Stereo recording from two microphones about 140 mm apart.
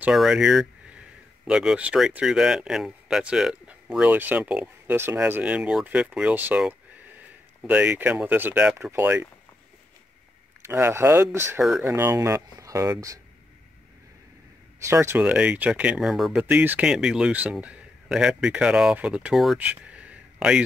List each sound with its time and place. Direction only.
0.0 s speech: 5° right (ahead or behind)
10.6 s speech: 15° right (ahead or behind)
14.9 s speech: 15° right (ahead or behind)
16.4 s speech: 10° right (ahead or behind)